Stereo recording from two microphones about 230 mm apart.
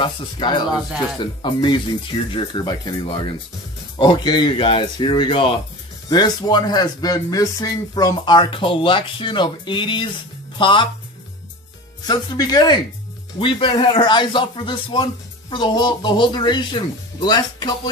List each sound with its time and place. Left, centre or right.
0.0 s a man's voice: centre
12.1 s a man's voice: centre